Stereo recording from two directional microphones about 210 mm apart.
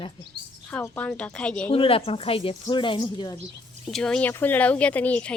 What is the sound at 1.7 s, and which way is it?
Speech, 25° left (ahead or behind).